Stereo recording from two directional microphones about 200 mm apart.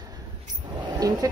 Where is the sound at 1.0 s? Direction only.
20° right (ahead or behind).